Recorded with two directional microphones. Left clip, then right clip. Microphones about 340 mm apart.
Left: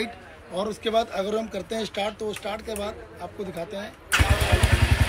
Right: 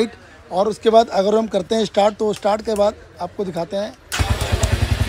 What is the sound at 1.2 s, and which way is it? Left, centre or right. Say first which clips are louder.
Speech: right 10 dB; right.